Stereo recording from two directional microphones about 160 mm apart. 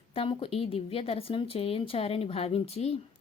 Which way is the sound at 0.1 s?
35° left (ahead or behind).